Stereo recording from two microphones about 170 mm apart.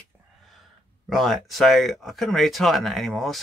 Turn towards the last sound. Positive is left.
turn(degrees=0)  # may be behind; listen again after turning